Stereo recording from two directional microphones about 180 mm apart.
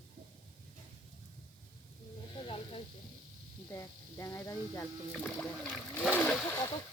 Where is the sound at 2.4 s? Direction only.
30° left (ahead or behind).